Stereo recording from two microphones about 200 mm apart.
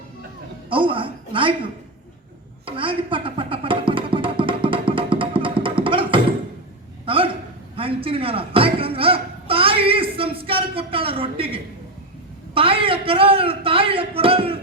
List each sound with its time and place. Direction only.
0.7 s a man's voice: 25° right (ahead or behind)
2.6 s music: 25° right (ahead or behind)
7.0 s a sound: 25° right (ahead or behind)
12.5 s a man's voice: 25° right (ahead or behind)